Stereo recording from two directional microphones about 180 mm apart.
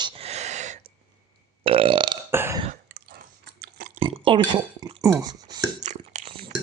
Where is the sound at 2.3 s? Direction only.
15° right (ahead or behind).